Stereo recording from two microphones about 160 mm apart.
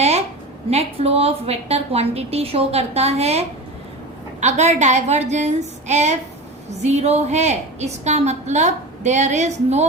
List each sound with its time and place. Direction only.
0.7 s a woman's voice: 40° right (ahead or behind)